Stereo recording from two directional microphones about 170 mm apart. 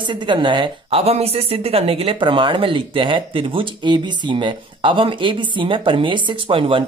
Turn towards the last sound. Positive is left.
turn(degrees=-30)  # may be behind; listen again after turning